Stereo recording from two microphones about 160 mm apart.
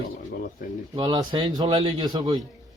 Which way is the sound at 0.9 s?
30° right (ahead or behind).